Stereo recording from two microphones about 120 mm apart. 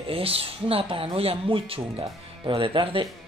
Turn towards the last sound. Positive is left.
turn(degrees=-50)  # may be behind; listen again after turning